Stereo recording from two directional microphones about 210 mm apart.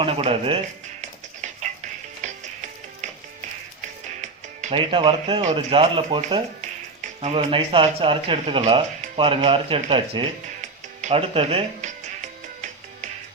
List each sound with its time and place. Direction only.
0.0 s speech: 25° right (ahead or behind)
3.0 s music: 35° right (ahead or behind)
4.2 s speech: 30° right (ahead or behind)